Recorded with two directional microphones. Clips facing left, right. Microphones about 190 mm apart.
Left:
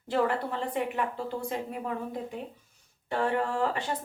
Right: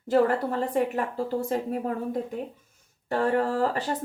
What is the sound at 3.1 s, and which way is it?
Speech, 40° right (ahead or behind).